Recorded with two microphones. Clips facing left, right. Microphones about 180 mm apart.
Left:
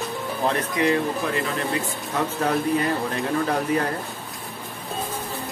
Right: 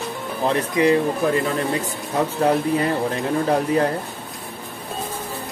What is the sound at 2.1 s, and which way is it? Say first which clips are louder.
Speech: right 4 dB; 35° right (ahead or behind).